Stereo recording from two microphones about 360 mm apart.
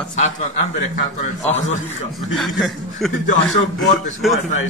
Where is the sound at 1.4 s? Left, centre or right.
Centre.